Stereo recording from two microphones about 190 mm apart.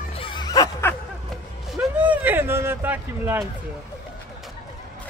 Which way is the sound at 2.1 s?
10° right (ahead or behind).